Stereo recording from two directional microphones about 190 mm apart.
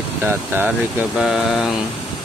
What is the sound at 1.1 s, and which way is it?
Mantra, centre (ahead or behind).